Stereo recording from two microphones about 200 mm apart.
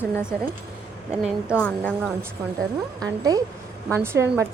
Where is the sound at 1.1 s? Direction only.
5° right (ahead or behind).